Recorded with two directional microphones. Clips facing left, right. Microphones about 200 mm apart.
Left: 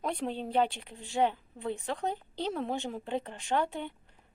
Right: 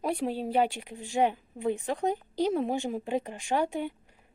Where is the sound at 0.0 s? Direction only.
10° right (ahead or behind).